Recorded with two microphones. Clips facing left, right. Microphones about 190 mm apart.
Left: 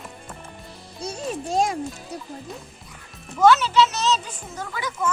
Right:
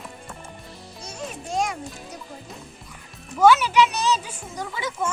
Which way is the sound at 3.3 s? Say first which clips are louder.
Even; 10° right (ahead or behind).